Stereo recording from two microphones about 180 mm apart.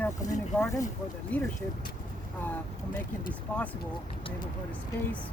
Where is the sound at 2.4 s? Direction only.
10° left (ahead or behind).